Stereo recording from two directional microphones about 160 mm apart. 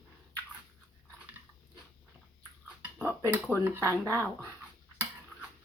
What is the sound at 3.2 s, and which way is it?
Speech, 15° right (ahead or behind).